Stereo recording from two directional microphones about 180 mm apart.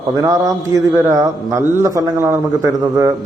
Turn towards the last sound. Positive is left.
turn(degrees=-15)  # may be behind; listen again after turning